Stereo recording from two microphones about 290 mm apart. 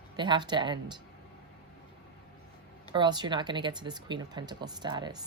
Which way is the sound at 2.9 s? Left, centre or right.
Centre.